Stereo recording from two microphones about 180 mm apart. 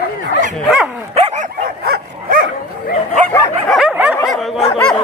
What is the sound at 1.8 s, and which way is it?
Dog, 60° right (ahead or behind).